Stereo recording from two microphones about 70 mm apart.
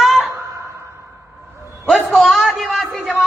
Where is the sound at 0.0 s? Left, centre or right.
Centre.